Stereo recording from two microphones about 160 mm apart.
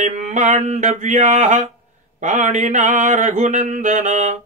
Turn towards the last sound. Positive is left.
turn(degrees=-50)  # may be behind; listen again after turning